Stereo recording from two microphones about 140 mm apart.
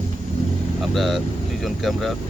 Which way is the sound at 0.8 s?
Centre (ahead or behind).